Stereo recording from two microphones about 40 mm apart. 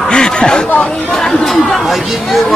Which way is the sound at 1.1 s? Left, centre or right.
Centre.